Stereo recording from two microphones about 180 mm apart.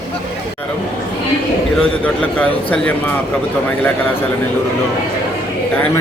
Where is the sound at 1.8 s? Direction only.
5° left (ahead or behind).